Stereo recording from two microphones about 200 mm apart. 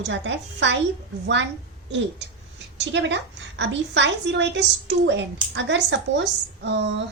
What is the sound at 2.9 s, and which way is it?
A woman's voice, 65° right (ahead or behind).